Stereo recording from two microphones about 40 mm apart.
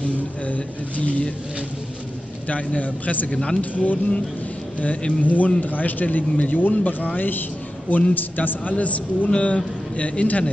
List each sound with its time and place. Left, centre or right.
0.0 s a man's voice: left
2.4 s a man's voice: left
3.3 s speech: left
3.7 s a man's voice: left
7.2 s a man's voice: left